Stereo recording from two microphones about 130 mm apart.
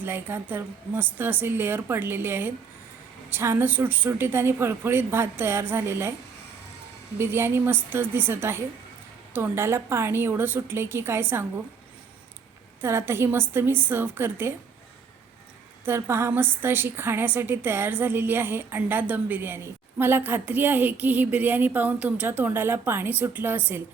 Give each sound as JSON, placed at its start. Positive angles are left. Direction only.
{"t": 0.0, "sound": "a woman's voice", "side_deg": -15}
{"t": 7.2, "sound": "a woman's voice", "side_deg": -20}
{"t": 12.8, "sound": "a woman's voice", "side_deg": -20}
{"t": 15.8, "sound": "a woman's voice", "side_deg": -20}